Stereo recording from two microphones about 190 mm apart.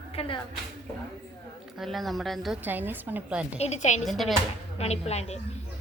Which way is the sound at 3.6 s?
35° left (ahead or behind).